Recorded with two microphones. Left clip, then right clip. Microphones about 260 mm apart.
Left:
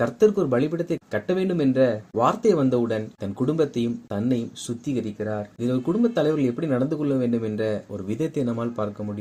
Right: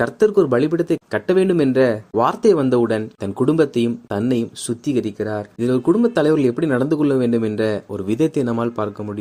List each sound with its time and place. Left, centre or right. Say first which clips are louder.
0.0 s speech: right 4 dB; right